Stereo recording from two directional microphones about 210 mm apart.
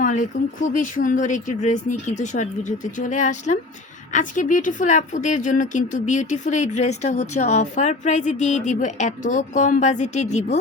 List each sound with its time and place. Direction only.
0.6 s a woman's voice: 40° left (ahead or behind)